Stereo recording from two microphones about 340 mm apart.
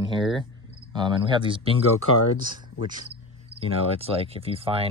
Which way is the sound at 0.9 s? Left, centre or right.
Centre.